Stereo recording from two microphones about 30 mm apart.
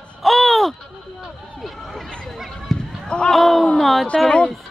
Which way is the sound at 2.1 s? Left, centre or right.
Left.